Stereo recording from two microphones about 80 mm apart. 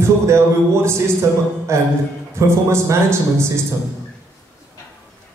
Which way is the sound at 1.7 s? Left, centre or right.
Right.